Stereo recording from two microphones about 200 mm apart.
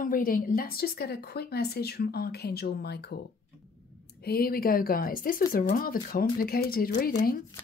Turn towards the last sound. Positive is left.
turn(degrees=45)  # may be behind; listen again after turning